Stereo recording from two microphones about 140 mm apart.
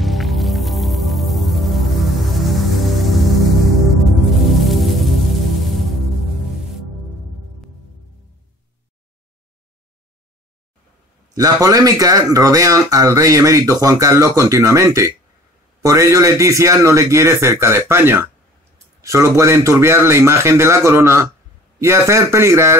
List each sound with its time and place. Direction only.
0.0 s music: centre (ahead or behind)
4.5 s music: centre (ahead or behind)
11.3 s speech: 25° right (ahead or behind)